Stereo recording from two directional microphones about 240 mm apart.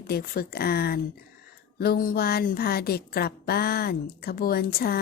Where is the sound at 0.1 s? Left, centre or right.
Left.